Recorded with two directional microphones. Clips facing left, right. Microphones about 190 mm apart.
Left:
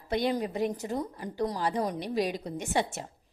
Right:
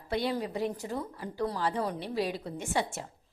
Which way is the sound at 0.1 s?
20° left (ahead or behind).